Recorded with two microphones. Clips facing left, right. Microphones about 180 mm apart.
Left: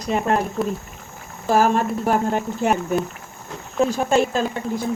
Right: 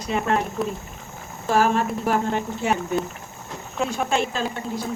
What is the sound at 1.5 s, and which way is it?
Speech, 40° left (ahead or behind).